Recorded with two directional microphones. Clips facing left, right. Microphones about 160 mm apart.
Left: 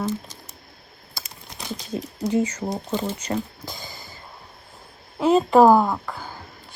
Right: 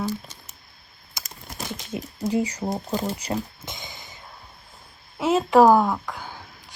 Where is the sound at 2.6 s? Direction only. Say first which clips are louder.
Even; 5° right (ahead or behind).